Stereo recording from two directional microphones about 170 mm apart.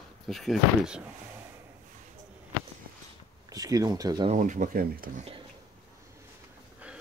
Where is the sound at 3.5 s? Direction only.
20° right (ahead or behind).